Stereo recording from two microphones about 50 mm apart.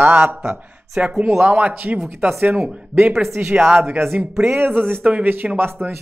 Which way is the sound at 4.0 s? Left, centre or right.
Right.